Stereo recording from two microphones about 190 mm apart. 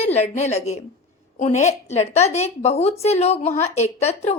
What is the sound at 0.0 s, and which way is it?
A woman's voice, 35° left (ahead or behind).